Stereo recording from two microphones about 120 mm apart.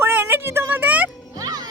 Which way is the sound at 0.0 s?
15° right (ahead or behind).